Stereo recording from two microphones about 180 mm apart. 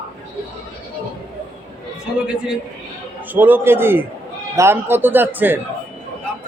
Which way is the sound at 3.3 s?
10° right (ahead or behind).